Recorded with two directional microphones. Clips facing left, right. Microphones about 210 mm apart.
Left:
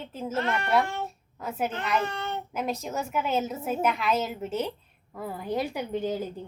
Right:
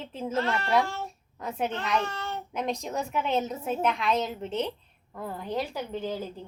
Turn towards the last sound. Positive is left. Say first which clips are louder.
# left 3 dB
turn(degrees=15)  # may be behind; listen again after turning